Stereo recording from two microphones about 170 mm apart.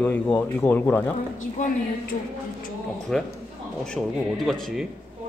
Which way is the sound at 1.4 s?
50° left (ahead or behind).